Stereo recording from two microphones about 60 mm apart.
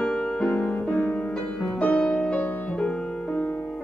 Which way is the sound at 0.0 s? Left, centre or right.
Centre.